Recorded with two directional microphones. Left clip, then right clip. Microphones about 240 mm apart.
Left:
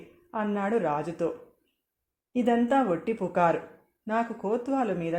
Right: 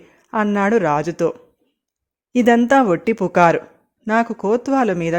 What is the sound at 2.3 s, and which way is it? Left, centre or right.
Speech, right.